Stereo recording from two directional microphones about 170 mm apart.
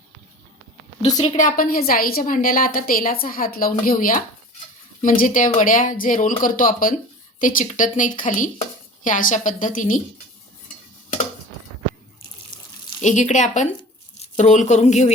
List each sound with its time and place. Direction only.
1.2 s a woman's voice: 45° left (ahead or behind)
13.0 s speech: 45° left (ahead or behind)